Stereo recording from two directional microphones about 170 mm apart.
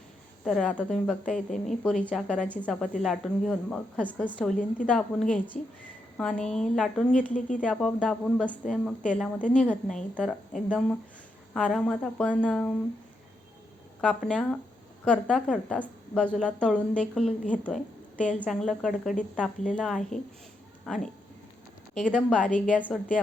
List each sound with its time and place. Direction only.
0.4 s a woman's voice: 5° left (ahead or behind)
7.3 s speech: 50° left (ahead or behind)
7.6 s a woman's voice: 5° left (ahead or behind)
14.3 s a woman's voice: 5° left (ahead or behind)
22.3 s a woman's voice: 5° left (ahead or behind)